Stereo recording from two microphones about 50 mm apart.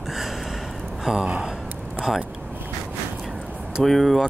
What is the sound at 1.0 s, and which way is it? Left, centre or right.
Speech, centre.